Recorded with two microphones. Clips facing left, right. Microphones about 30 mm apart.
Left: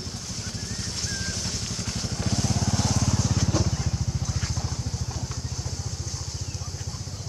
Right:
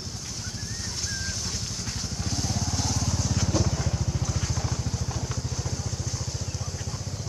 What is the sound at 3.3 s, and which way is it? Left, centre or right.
Vehicle, centre.